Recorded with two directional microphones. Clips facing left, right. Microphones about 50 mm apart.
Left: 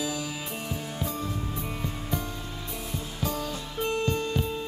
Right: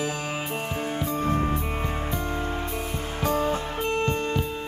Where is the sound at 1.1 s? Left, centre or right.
Right.